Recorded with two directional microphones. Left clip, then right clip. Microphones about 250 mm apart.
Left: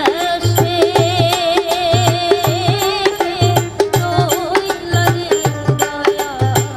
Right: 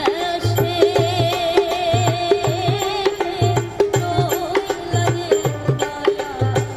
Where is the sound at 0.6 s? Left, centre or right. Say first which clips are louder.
Left 2 dB; centre.